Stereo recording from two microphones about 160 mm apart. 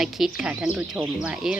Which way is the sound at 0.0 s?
5° right (ahead or behind).